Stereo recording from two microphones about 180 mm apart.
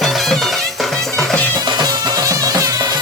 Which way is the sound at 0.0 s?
Centre (ahead or behind).